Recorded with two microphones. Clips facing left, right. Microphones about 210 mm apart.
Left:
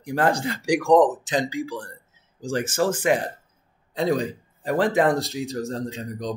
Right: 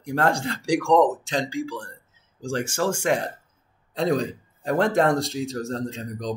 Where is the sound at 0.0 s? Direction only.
Centre (ahead or behind).